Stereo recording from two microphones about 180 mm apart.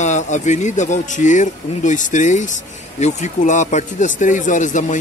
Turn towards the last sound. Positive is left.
turn(degrees=45)  # may be behind; listen again after turning